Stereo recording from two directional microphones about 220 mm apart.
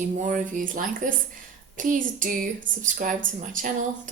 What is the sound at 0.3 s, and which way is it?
A woman's voice, 35° right (ahead or behind).